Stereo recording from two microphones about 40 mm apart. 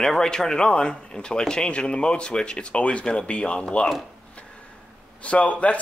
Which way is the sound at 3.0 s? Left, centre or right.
Centre.